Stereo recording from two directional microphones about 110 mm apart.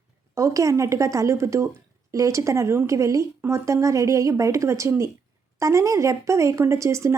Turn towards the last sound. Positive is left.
turn(degrees=-25)  # may be behind; listen again after turning